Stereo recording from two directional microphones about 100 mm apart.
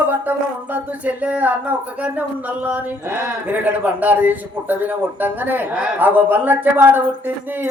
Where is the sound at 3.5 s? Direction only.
15° right (ahead or behind).